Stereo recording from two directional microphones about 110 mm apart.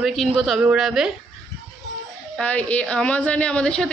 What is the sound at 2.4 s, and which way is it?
A woman's voice, 15° left (ahead or behind).